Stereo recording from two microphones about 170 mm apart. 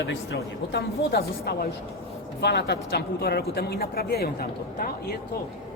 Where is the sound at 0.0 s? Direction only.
90° left; by 4.9 s 65° left (ahead or behind).